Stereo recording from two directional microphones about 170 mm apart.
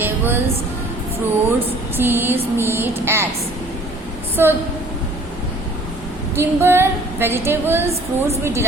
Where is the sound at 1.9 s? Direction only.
10° right (ahead or behind).